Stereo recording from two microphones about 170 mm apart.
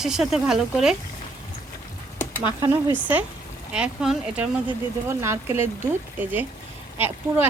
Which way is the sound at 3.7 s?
5° right (ahead or behind).